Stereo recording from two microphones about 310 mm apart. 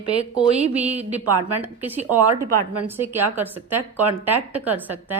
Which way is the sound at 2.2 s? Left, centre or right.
Right.